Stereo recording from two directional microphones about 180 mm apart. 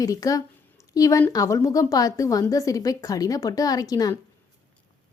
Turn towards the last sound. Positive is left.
turn(degrees=20)  # may be behind; listen again after turning